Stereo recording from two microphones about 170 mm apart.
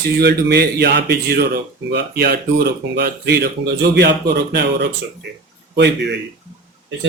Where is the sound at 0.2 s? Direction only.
80° right.